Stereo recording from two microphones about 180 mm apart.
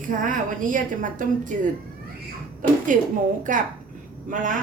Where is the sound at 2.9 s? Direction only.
45° right (ahead or behind).